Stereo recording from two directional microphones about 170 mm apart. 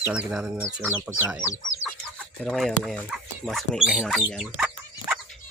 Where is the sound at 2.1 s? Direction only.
5° left (ahead or behind).